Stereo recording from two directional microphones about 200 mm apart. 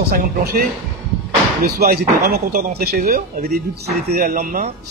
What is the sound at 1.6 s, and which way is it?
Speech, 45° right (ahead or behind).